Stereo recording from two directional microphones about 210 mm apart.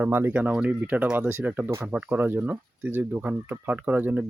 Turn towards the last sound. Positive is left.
turn(degrees=-10)  # may be behind; listen again after turning